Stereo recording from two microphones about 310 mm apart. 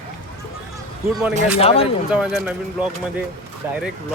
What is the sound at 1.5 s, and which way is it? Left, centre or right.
Speech, centre.